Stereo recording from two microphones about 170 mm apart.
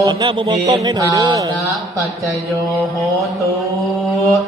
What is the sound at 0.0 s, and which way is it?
Speech, 25° right (ahead or behind).